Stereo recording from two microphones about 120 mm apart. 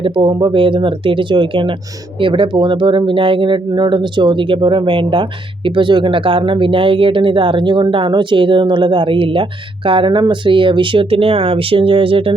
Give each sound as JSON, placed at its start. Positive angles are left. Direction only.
{"t": 0.0, "sound": "speech", "side_deg": -40}